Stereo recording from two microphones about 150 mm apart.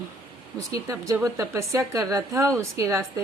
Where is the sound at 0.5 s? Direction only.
25° right (ahead or behind).